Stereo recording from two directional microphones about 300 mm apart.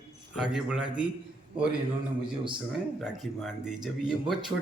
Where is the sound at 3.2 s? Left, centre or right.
Centre.